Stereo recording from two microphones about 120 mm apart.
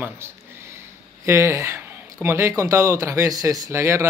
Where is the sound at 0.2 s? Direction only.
20° right (ahead or behind).